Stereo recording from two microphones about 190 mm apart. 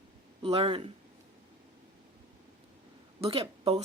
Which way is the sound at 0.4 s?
30° right (ahead or behind).